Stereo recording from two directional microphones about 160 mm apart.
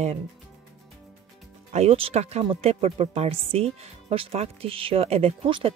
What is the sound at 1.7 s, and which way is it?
Speech, 40° right (ahead or behind).